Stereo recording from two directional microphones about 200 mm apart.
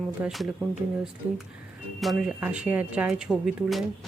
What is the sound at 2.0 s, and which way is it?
Speech, centre (ahead or behind).